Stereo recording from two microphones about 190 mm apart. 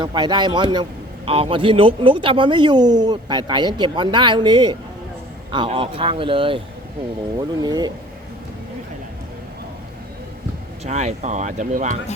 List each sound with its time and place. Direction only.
0.0 s a man's voice: 25° right (ahead or behind)
7.6 s a man's voice: 20° right (ahead or behind)
10.8 s speech: 40° right (ahead or behind)